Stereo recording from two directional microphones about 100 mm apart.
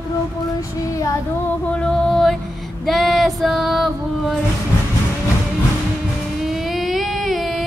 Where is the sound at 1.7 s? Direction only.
10° left (ahead or behind).